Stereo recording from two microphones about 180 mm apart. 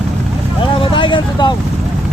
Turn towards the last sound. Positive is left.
turn(degrees=25)  # may be behind; listen again after turning